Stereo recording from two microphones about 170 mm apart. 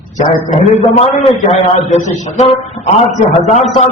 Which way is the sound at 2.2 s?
40° left (ahead or behind).